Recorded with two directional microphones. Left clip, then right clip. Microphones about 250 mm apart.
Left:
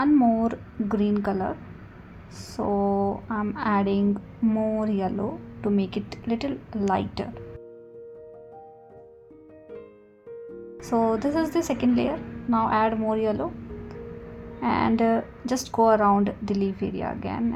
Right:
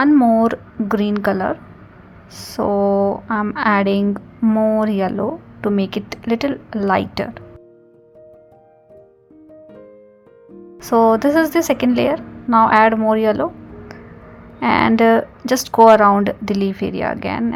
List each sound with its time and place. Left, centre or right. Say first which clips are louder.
0.0 s a woman's voice: right 8 dB; right
10.8 s a woman's voice: right 11 dB; right